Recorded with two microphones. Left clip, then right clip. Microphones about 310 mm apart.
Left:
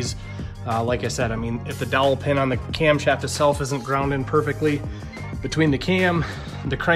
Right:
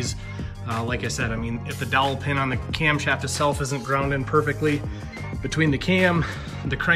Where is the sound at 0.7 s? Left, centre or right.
Centre.